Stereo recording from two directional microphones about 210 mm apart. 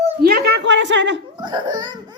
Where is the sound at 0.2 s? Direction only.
45° right (ahead or behind).